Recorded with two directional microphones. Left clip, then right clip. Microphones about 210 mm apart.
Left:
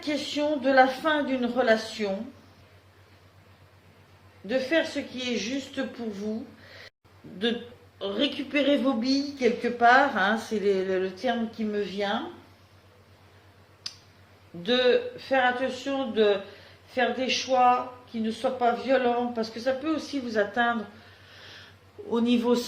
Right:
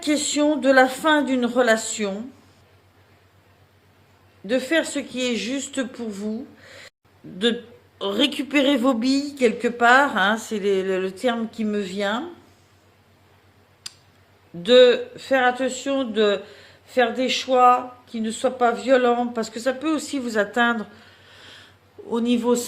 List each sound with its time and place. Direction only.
0.0 s speech: 55° right (ahead or behind)
4.4 s speech: 60° right (ahead or behind)
7.9 s a woman's voice: 55° right (ahead or behind)
11.2 s speech: 50° right (ahead or behind)
13.8 s tick-tock: 30° right (ahead or behind)
14.6 s speech: 50° right (ahead or behind)
21.2 s a sound: 30° right (ahead or behind)
22.1 s a man's voice: 25° right (ahead or behind)